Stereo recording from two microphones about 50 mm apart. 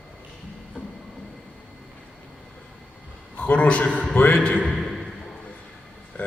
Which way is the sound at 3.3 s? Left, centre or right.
Left.